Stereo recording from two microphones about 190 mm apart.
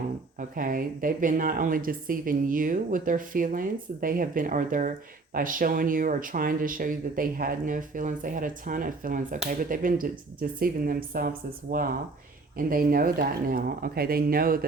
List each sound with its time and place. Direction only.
0.3 s speech: 45° right (ahead or behind)